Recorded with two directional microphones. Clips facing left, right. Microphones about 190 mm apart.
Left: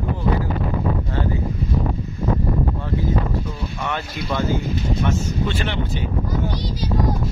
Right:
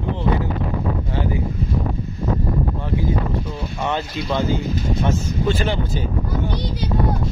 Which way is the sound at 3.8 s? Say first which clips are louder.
Right 5 dB; 25° right (ahead or behind).